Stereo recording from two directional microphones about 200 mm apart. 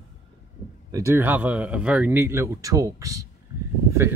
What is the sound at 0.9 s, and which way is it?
Speech, 10° right (ahead or behind).